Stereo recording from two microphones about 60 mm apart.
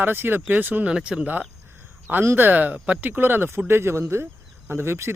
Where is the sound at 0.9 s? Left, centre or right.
Centre.